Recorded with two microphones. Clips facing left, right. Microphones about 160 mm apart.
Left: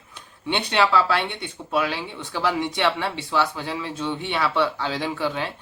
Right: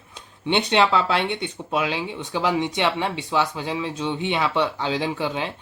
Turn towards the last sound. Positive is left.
turn(degrees=-20)  # may be behind; listen again after turning